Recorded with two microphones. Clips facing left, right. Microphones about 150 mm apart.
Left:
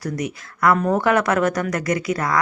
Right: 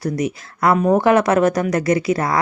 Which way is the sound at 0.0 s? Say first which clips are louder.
Right 5 dB; 25° right (ahead or behind).